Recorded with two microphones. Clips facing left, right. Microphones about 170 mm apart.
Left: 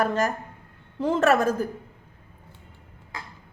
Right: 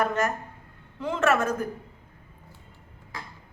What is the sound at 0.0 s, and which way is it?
A woman's voice, 35° left (ahead or behind).